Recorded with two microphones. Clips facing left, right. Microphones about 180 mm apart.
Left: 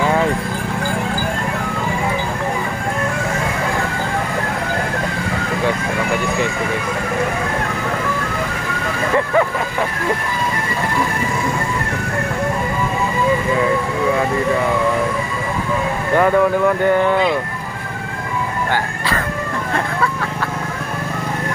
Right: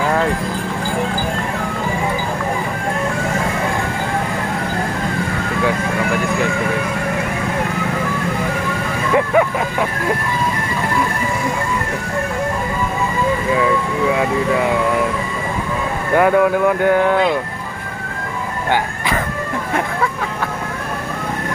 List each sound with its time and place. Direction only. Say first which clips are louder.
16.2 s speech: right 1 dB; 5° right (ahead or behind)
18.7 s music: right 2 dB; 15° right (ahead or behind)